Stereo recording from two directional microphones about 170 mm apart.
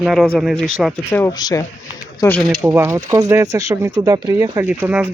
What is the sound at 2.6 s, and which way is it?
Speech, 15° right (ahead or behind).